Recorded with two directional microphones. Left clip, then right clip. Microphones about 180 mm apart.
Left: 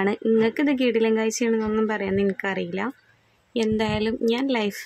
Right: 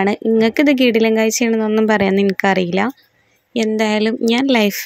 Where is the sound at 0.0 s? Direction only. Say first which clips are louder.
Right 6 dB; 30° right (ahead or behind).